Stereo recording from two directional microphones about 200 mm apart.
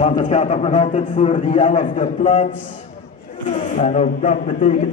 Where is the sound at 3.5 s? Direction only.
40° left (ahead or behind).